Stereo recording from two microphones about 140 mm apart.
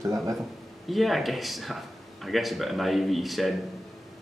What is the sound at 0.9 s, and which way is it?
Speech, centre (ahead or behind).